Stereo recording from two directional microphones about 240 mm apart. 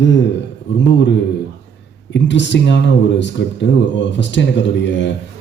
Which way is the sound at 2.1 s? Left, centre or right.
Left.